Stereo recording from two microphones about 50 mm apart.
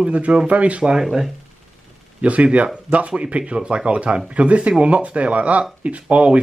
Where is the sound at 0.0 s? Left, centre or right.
Right.